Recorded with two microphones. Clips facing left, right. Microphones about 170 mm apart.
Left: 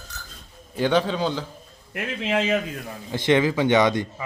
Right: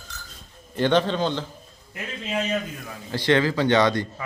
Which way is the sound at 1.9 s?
85° left.